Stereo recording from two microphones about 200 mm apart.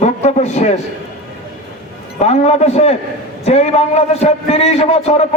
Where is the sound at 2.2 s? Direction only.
30° left (ahead or behind).